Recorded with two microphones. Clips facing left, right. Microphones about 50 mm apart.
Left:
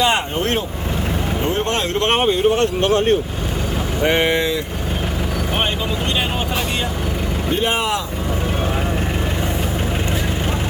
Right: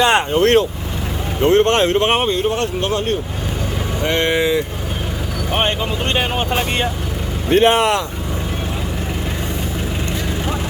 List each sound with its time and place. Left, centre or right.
0.0 s vehicle: right
1.5 s speech: right
2.1 s speech: centre
2.6 s speech: left
4.0 s speech: centre
7.5 s speech: right